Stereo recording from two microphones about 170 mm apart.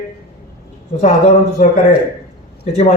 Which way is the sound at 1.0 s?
40° left (ahead or behind).